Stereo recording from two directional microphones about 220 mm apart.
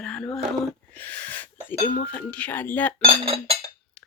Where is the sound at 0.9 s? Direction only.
5° left (ahead or behind).